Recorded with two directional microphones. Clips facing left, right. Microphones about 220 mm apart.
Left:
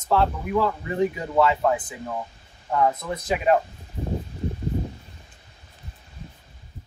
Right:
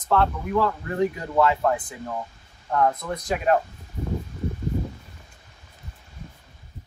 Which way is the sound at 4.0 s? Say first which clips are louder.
Even; 30° left (ahead or behind).